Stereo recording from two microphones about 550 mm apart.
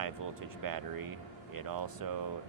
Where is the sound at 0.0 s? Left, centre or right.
Right.